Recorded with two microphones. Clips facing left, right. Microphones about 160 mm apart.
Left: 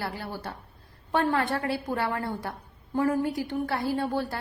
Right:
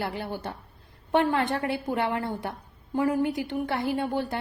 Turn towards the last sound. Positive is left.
turn(degrees=-20)  # may be behind; listen again after turning